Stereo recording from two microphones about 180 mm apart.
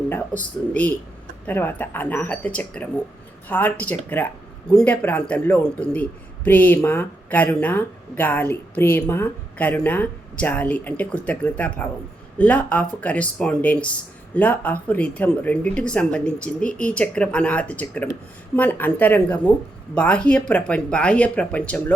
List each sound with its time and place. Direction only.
0.1 s a man's voice: 10° left (ahead or behind)